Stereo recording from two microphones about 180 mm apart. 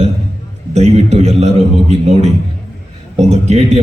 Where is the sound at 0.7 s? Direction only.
35° right (ahead or behind).